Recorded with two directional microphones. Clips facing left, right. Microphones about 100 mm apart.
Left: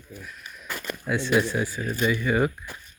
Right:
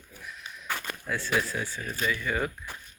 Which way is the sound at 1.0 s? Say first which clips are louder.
Left 7 dB; 20° left (ahead or behind).